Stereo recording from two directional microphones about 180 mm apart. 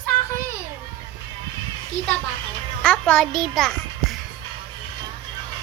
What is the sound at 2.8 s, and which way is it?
Music, 5° left (ahead or behind).